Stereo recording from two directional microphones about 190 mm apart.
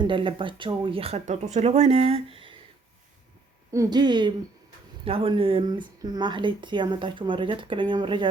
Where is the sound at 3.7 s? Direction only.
20° right (ahead or behind).